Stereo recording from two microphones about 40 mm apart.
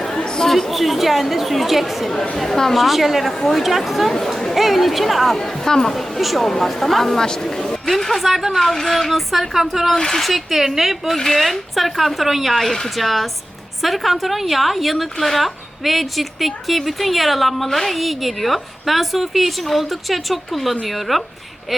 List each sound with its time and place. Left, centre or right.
0.1 s chatter: centre
0.7 s a woman's voice: centre
2.7 s a woman's voice: centre
4.5 s speech: centre
5.5 s a woman's voice: centre
5.9 s a woman's voice: centre
8.3 s speech: centre
8.5 s speech: centre
9.9 s a woman's voice: centre